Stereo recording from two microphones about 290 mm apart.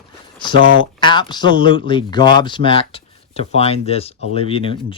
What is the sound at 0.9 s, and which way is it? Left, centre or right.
Speech, centre.